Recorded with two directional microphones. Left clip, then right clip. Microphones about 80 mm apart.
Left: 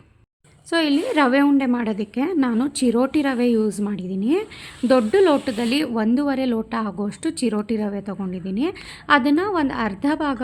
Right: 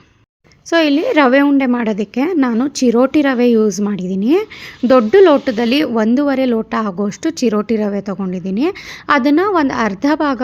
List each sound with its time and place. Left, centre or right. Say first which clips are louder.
0.7 s a woman's voice: right 7 dB; right